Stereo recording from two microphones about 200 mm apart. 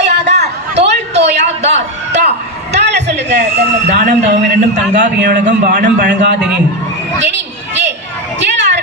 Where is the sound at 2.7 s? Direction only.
55° right (ahead or behind).